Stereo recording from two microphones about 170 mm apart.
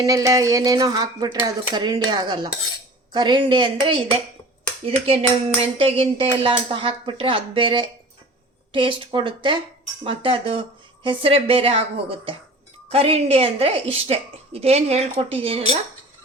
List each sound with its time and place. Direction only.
0.0 s a woman's voice: 20° right (ahead or behind)